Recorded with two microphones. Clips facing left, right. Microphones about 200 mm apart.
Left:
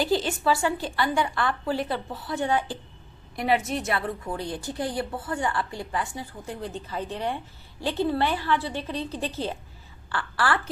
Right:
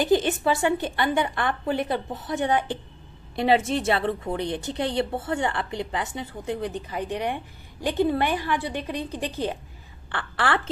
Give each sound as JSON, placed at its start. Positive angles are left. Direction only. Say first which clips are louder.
{"t": 0.0, "sound": "a woman's voice", "louder": "right 3 dB", "side_deg": -20}